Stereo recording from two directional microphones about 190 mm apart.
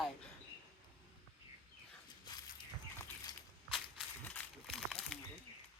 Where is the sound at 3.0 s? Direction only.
20° left (ahead or behind).